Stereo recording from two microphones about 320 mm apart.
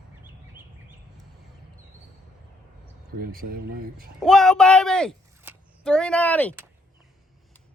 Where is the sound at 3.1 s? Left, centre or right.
Right.